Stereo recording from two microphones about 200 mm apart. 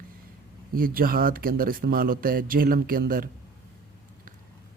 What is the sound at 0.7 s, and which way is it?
Speech, 45° right (ahead or behind).